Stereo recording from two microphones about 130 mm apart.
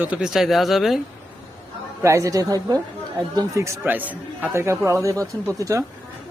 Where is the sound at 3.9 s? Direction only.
15° right (ahead or behind).